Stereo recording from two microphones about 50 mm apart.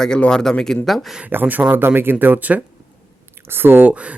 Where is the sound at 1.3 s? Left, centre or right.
Right.